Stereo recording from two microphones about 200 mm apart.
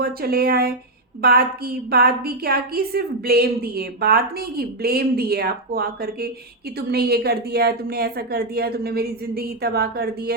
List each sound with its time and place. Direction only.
0.0 s a woman's voice: 50° right (ahead or behind)